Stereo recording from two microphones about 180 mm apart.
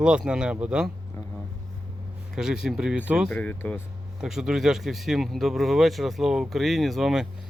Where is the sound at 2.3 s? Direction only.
5° right (ahead or behind).